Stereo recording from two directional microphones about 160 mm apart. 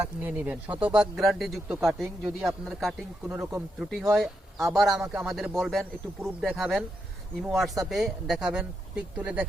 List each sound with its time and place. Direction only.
0.0 s a man's voice: 10° right (ahead or behind)
3.2 s speech: 15° right (ahead or behind)
3.8 s a man's voice: centre (ahead or behind)